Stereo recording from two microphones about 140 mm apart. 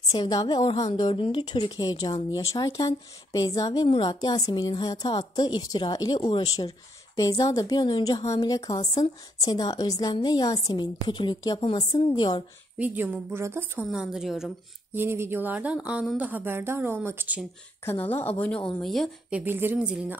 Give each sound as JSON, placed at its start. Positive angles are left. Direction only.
{"t": 0.1, "sound": "a woman's voice", "side_deg": 25}
{"t": 12.7, "sound": "speech", "side_deg": -10}
{"t": 13.8, "sound": "a woman's voice", "side_deg": -5}
{"t": 15.0, "sound": "speech", "side_deg": -15}
{"t": 18.8, "sound": "a woman's voice", "side_deg": 0}
{"t": 19.4, "sound": "speech", "side_deg": -15}